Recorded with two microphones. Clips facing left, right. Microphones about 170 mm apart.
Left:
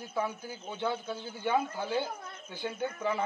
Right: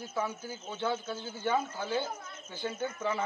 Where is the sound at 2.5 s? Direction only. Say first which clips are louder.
Even; 5° left (ahead or behind).